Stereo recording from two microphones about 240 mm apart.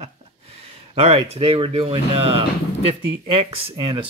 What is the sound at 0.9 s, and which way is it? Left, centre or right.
Speech, right.